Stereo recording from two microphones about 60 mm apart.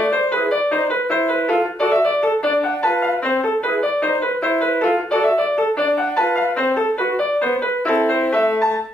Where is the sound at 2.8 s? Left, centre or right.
Centre.